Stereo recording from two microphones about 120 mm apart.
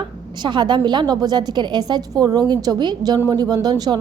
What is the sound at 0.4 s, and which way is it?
Speech, 40° right (ahead or behind).